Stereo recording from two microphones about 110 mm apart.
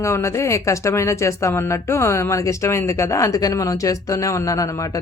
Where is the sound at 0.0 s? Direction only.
25° left (ahead or behind).